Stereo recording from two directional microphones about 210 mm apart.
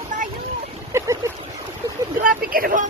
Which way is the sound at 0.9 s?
15° right (ahead or behind).